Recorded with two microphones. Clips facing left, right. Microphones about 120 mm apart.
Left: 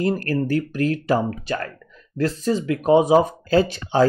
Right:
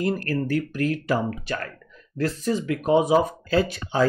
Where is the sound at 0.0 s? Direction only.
30° left (ahead or behind).